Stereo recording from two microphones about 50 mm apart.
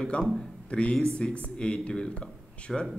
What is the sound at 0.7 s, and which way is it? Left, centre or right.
Speech, left.